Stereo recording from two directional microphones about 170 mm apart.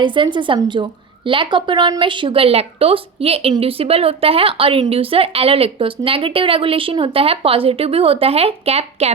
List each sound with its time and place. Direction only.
0.0 s a woman's voice: 30° right (ahead or behind)